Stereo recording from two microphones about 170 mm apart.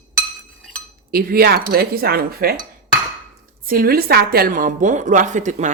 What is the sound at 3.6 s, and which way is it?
A woman's voice, 60° right (ahead or behind).